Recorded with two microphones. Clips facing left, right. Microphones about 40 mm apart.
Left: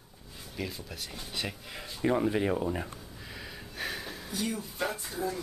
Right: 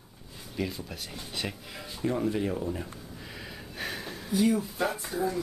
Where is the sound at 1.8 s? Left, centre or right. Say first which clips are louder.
Left 2 dB; centre.